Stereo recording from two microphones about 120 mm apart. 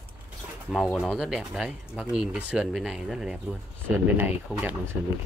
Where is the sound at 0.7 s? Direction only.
Centre (ahead or behind).